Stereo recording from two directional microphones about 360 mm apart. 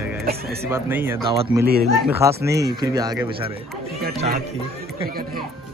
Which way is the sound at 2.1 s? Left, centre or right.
Centre.